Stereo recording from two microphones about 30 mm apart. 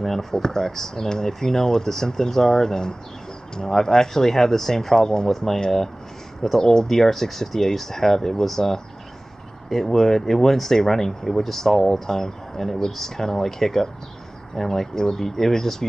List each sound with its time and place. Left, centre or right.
0.0 s speech: centre
6.6 s speech: left